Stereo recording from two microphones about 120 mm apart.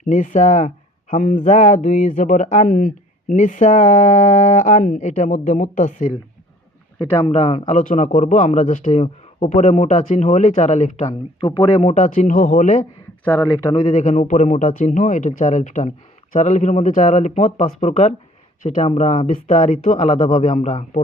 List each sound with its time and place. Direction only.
0.0 s speech: 90° left
7.3 s a man's voice: 60° left (ahead or behind)
11.3 s a man's voice: 45° left (ahead or behind); by 12.8 s 85° left
13.2 s speech: 15° left (ahead or behind)
13.8 s speech: 75° left (ahead or behind); by 17.4 s 90° left
17.6 s a man's voice: 70° left (ahead or behind)
18.6 s speech: 90° left
18.9 s a man's voice: 75° left (ahead or behind)